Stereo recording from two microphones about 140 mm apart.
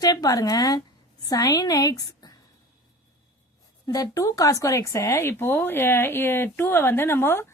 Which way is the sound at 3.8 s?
25° left (ahead or behind).